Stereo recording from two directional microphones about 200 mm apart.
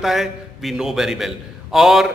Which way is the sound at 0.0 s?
Centre (ahead or behind).